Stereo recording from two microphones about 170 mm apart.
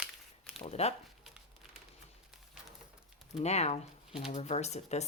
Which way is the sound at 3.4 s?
40° left (ahead or behind).